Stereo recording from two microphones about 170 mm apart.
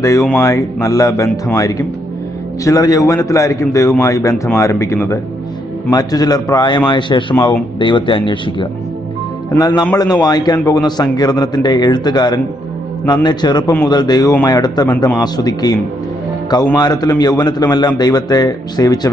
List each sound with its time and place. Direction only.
0.0 s a man's voice: 20° left (ahead or behind)